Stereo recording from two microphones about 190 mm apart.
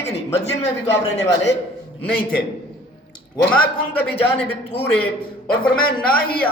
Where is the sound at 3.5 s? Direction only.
10° left (ahead or behind).